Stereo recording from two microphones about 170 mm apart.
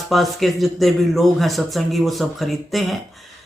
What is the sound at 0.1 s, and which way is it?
A man's voice, centre (ahead or behind).